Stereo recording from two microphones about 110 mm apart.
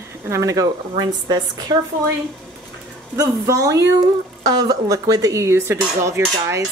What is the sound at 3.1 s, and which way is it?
Speech, 30° right (ahead or behind).